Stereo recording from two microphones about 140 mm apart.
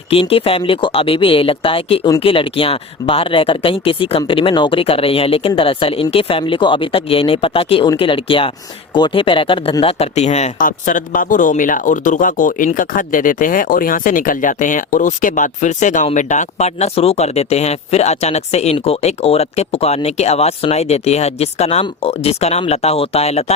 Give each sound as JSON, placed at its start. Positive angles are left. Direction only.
{"t": 0.1, "sound": "speech", "side_deg": 45}
{"t": 9.8, "sound": "speech", "side_deg": 50}
{"t": 10.6, "sound": "speech", "side_deg": 75}